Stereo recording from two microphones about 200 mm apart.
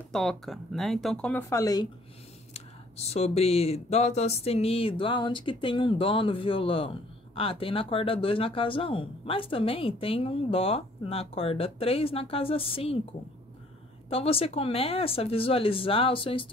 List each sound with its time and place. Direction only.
0.1 s speech: centre (ahead or behind)
2.5 s speech: 30° left (ahead or behind)
14.0 s speech: 30° left (ahead or behind)